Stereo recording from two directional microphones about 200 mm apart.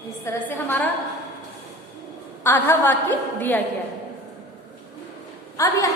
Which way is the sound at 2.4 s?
10° left (ahead or behind).